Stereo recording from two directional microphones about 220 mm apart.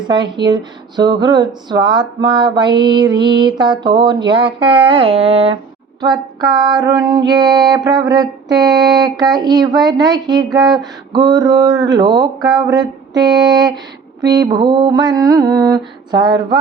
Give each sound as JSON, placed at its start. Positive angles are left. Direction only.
{"t": 0.1, "sound": "speech", "side_deg": -20}